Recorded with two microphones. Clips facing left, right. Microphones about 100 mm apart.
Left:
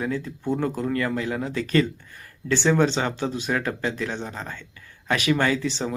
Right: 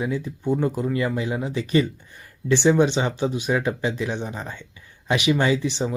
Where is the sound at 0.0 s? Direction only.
15° right (ahead or behind).